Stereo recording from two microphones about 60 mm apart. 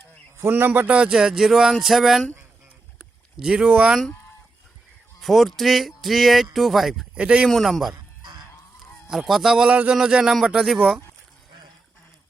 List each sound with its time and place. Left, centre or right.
0.3 s a man's voice: right
0.9 s speech: centre
3.4 s speech: centre
5.2 s speech: centre
7.2 s speech: centre
7.4 s speech: centre
9.0 s speech: centre
9.6 s speech: right
9.9 s speech: centre